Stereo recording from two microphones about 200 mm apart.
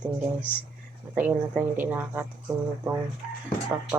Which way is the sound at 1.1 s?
10° right (ahead or behind).